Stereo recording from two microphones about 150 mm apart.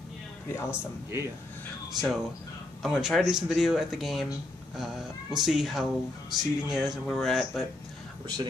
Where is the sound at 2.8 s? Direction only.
5° right (ahead or behind).